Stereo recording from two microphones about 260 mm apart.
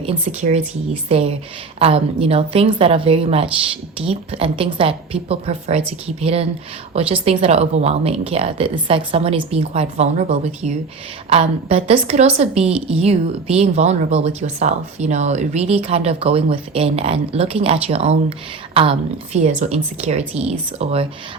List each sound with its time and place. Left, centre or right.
0.0 s a woman's voice: right